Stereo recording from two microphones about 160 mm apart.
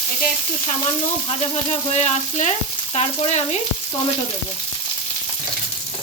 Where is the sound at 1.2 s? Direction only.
45° left (ahead or behind).